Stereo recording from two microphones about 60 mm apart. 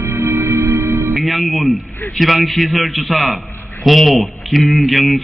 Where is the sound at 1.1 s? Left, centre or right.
Centre.